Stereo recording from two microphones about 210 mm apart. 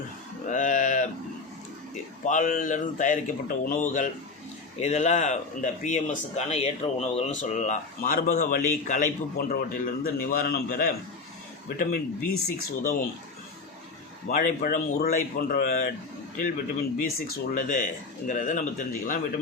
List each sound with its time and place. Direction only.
0.4 s a sound: 35° left (ahead or behind)
2.2 s speech: 40° left (ahead or behind)
14.3 s speech: 40° left (ahead or behind)
17.0 s speech: 40° left (ahead or behind)